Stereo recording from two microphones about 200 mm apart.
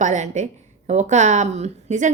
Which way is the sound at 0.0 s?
40° right (ahead or behind).